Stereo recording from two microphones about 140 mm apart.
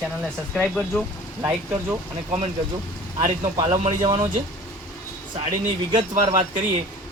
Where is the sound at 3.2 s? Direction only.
35° right (ahead or behind).